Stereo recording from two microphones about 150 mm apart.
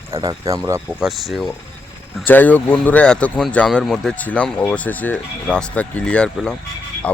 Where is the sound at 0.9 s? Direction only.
5° right (ahead or behind).